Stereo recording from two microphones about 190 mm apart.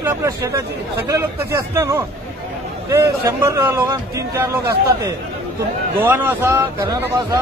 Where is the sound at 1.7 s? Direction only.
15° right (ahead or behind).